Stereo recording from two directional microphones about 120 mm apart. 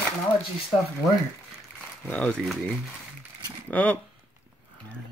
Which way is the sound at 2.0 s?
10° left (ahead or behind).